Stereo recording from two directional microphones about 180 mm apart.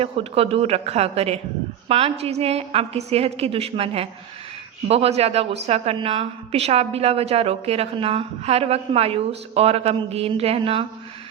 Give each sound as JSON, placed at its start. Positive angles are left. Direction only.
{"t": 0.0, "sound": "a woman's voice", "side_deg": -30}